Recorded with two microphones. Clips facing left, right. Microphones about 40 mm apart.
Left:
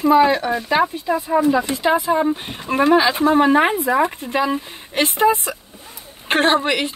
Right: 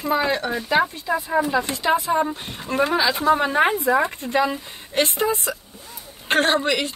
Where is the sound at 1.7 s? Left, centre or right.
Centre.